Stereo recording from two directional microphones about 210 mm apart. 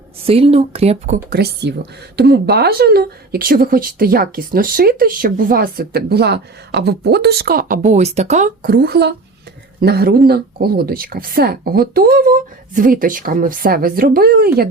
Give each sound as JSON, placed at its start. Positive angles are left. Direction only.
{"t": 0.3, "sound": "speech", "side_deg": -25}